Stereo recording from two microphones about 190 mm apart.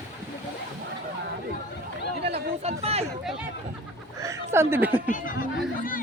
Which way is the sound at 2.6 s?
35° right (ahead or behind).